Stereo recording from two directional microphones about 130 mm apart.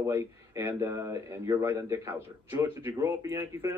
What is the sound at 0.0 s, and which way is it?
A man's voice, 20° right (ahead or behind).